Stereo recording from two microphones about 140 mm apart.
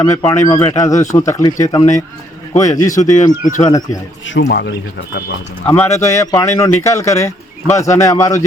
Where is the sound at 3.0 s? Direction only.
60° left (ahead or behind).